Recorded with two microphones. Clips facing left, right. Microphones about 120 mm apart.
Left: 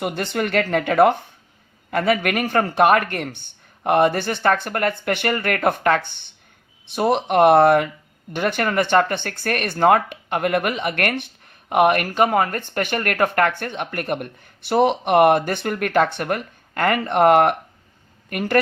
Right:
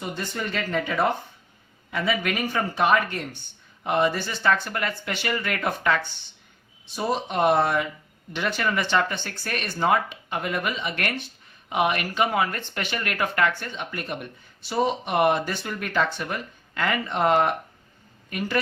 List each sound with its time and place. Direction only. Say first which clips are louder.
0.0 s speech: left 7 dB; 75° left (ahead or behind); by 18.6 s 55° left (ahead or behind)